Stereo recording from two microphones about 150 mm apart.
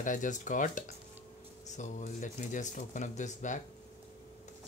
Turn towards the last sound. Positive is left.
turn(degrees=55)  # may be behind; listen again after turning